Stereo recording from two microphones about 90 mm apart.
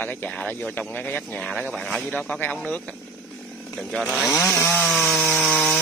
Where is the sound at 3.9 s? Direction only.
Centre (ahead or behind).